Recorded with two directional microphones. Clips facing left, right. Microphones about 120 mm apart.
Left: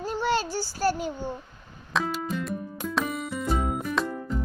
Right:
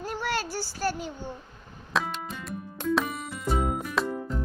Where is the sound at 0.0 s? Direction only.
25° left (ahead or behind).